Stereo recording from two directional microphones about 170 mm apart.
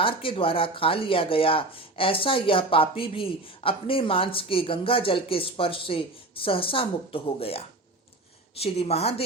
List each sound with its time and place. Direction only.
0.0 s speech: 30° left (ahead or behind)
8.6 s speech: 35° left (ahead or behind)